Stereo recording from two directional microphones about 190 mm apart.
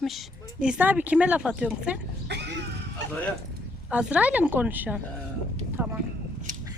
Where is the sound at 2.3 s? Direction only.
65° right (ahead or behind).